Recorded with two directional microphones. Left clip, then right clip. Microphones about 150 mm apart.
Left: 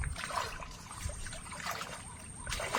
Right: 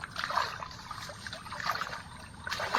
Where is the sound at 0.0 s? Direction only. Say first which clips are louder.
Right 5 dB; 30° left (ahead or behind).